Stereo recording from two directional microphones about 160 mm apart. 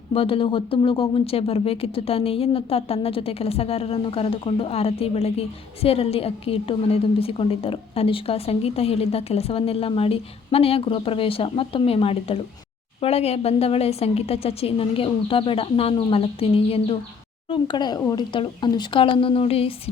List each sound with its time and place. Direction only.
0.1 s speech: 35° left (ahead or behind)